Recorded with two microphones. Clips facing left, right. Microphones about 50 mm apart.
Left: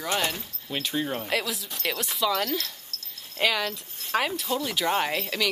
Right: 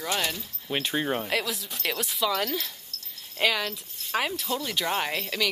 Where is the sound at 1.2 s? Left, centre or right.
Centre.